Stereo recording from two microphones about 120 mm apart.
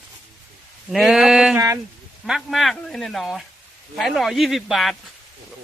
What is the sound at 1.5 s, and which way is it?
Speech, 25° right (ahead or behind).